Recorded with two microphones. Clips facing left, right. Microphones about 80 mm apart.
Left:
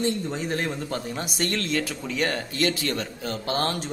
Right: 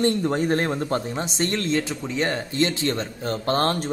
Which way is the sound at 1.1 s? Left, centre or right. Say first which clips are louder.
Right 3 dB; right.